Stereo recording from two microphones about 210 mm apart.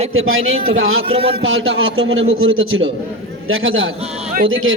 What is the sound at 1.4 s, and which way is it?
A man's voice, 75° right (ahead or behind).